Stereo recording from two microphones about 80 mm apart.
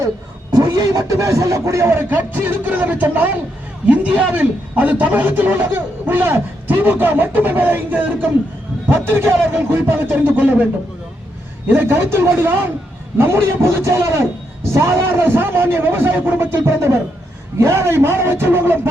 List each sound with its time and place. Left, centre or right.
0.5 s a man's voice: right
9.5 s a man's voice: right
11.7 s a man's voice: right